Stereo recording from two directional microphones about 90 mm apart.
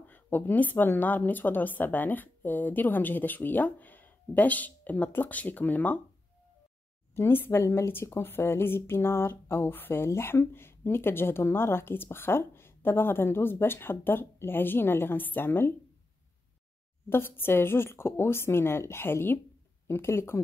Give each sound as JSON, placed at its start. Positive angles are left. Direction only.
{"t": 0.0, "sound": "a woman's voice", "side_deg": 20}
{"t": 7.2, "sound": "a woman's voice", "side_deg": 25}
{"t": 17.1, "sound": "a woman's voice", "side_deg": 25}